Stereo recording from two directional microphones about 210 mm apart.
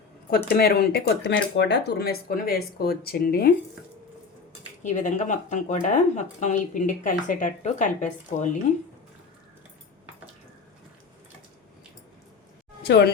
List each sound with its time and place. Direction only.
0.3 s speech: 45° left (ahead or behind)
4.8 s speech: 35° left (ahead or behind)
12.8 s speech: 55° left (ahead or behind)